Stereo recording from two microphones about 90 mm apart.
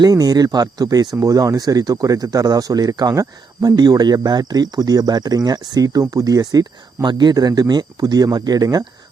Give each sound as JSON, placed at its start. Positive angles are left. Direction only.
{"t": 0.0, "sound": "speech", "side_deg": -40}